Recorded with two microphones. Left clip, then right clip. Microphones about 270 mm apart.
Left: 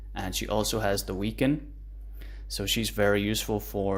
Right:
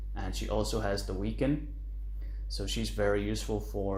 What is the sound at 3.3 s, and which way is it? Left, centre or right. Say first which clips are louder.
Speech: left 5 dB; left.